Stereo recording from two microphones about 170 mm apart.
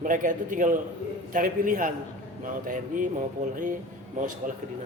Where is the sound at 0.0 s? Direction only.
50° right (ahead or behind).